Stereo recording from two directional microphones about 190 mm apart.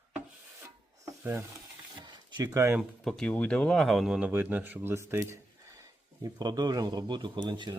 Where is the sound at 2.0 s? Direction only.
25° right (ahead or behind).